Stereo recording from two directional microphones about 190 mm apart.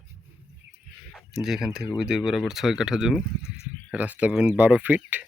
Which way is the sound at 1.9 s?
Centre (ahead or behind).